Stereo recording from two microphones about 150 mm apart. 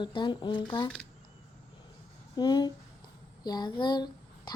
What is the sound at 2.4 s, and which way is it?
Speech, 30° left (ahead or behind).